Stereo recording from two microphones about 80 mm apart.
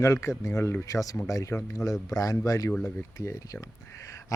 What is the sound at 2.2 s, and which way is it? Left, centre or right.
Speech, left.